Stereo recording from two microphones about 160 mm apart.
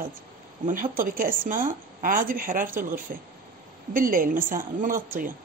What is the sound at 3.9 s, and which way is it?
Speech, 60° right (ahead or behind).